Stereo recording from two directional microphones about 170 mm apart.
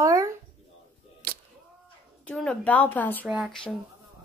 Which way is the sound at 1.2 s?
65° right (ahead or behind).